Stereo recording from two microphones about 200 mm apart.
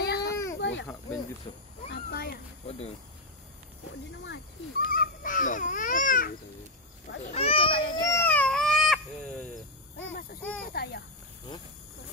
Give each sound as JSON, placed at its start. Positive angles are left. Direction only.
{"t": 0.0, "sound": "baby cry", "side_deg": 55}
{"t": 0.6, "sound": "snake", "side_deg": 65}
{"t": 1.9, "sound": "a sound", "side_deg": 50}
{"t": 4.2, "sound": "speech", "side_deg": 65}
{"t": 4.9, "sound": "speech", "side_deg": 45}
{"t": 7.3, "sound": "a child's voice", "side_deg": 30}
{"t": 8.0, "sound": "baby cry", "side_deg": 15}
{"t": 10.4, "sound": "speech", "side_deg": 5}
{"t": 10.7, "sound": "a child's voice", "side_deg": 50}